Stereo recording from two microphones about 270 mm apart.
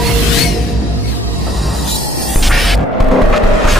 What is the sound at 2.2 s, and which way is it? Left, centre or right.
Music, centre.